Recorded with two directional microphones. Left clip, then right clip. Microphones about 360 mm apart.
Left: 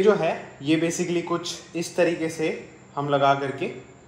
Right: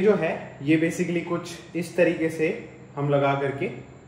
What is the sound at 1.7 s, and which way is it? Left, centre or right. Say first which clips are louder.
Speech: right 1 dB; centre.